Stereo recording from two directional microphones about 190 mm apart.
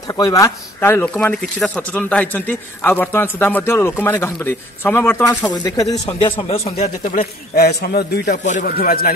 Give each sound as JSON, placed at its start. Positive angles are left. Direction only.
{"t": 0.1, "sound": "speech", "side_deg": 20}
{"t": 7.5, "sound": "a man's voice", "side_deg": 55}